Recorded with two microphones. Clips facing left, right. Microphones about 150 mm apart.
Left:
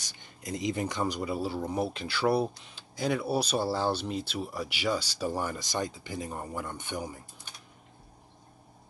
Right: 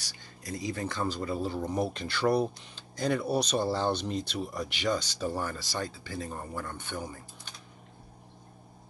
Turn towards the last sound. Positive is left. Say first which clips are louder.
# left 1 dB
turn(degrees=10)  # may be behind; listen again after turning